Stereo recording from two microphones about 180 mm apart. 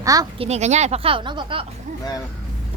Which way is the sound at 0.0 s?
20° right (ahead or behind).